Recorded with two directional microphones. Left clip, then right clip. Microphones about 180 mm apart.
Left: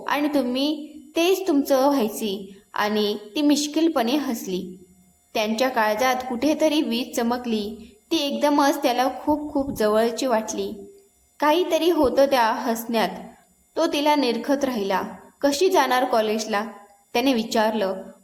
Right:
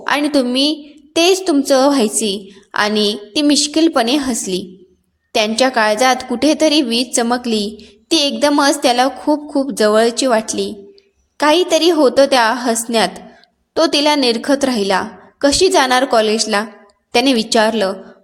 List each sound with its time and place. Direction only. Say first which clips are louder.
0.0 s a woman's voice: right 7 dB; 40° right (ahead or behind)